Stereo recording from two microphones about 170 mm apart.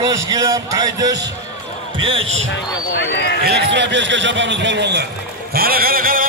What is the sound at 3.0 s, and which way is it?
Speech, 90° left.